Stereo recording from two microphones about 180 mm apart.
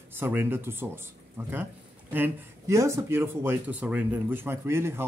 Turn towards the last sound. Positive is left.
turn(degrees=-15)  # may be behind; listen again after turning